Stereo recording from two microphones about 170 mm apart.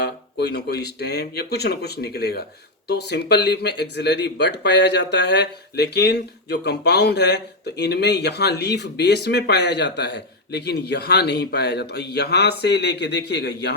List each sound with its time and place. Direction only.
0.0 s speech: 80° left